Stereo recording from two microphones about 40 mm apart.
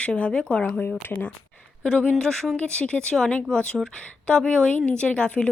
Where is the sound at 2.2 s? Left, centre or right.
Centre.